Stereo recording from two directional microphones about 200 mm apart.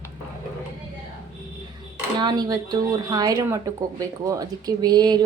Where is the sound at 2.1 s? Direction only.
20° right (ahead or behind).